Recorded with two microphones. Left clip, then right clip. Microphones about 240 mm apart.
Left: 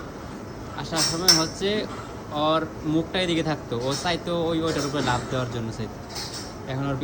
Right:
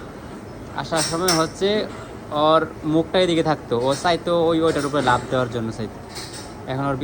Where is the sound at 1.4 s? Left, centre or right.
Centre.